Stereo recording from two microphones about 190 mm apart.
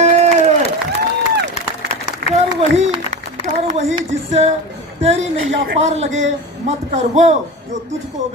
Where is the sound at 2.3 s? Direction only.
35° right (ahead or behind).